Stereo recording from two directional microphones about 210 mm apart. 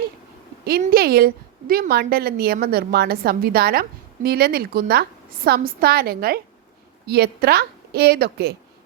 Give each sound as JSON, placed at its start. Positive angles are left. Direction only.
{"t": 0.6, "sound": "a woman's voice", "side_deg": -45}